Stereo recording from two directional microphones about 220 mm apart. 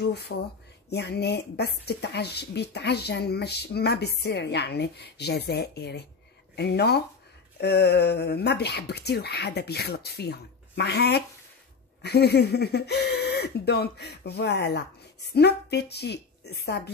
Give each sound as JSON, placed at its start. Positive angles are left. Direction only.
{"t": 0.0, "sound": "a woman's voice", "side_deg": 50}